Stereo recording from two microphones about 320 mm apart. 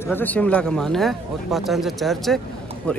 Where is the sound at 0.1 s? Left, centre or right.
Centre.